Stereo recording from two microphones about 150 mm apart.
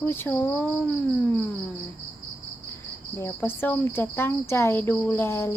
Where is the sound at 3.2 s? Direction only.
15° left (ahead or behind).